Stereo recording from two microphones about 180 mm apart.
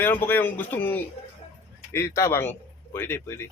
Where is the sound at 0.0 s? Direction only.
10° left (ahead or behind).